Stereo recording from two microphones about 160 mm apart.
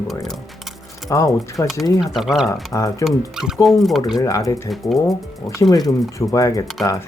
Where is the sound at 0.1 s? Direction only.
Centre (ahead or behind).